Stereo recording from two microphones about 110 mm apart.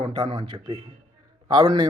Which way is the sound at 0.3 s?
40° right (ahead or behind).